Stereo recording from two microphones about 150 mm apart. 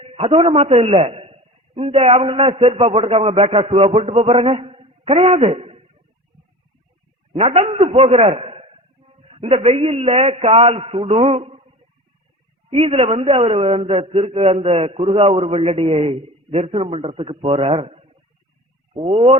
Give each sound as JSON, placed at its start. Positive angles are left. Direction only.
{"t": 0.0, "sound": "a man's voice", "side_deg": -40}
{"t": 7.3, "sound": "a man's voice", "side_deg": -40}
{"t": 12.7, "sound": "a man's voice", "side_deg": -40}